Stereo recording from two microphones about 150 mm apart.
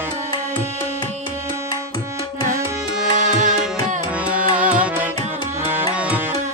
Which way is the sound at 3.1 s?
55° right (ahead or behind).